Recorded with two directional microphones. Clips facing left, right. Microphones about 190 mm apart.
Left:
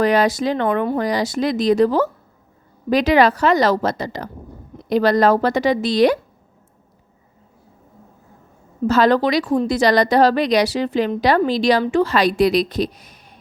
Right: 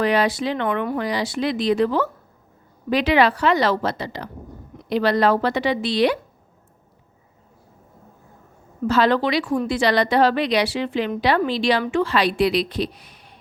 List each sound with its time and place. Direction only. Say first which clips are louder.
0.0 s a woman's voice: left 3 dB; 45° left (ahead or behind)
8.9 s a woman's voice: left 3 dB; 45° left (ahead or behind)